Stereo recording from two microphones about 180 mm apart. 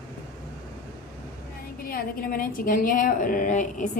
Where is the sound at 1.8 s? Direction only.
55° left (ahead or behind).